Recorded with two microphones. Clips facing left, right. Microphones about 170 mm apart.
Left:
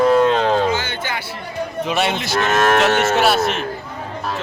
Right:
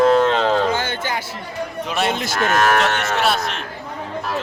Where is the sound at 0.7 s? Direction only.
50° right (ahead or behind).